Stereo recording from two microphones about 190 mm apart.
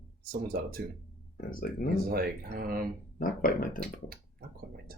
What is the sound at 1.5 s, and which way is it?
Speech, 50° left (ahead or behind).